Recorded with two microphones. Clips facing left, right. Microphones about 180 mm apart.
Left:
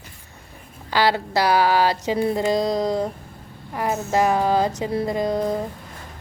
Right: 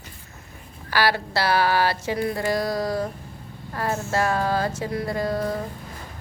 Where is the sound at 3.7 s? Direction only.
15° left (ahead or behind).